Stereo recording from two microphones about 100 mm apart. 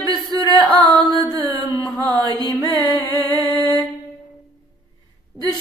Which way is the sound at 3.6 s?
45° right (ahead or behind).